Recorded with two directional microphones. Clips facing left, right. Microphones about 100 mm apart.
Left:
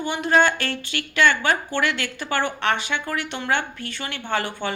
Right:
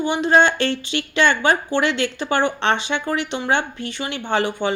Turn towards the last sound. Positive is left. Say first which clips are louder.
# right 5 dB
turn(degrees=-20)  # may be behind; listen again after turning